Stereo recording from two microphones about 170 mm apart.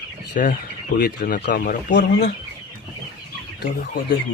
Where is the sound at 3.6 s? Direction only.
55° left (ahead or behind).